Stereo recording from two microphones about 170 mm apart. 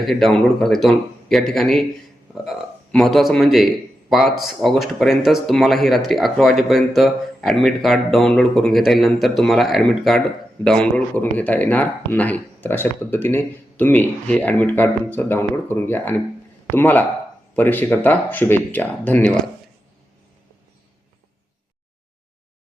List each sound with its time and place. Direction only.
0.0 s speech: centre (ahead or behind)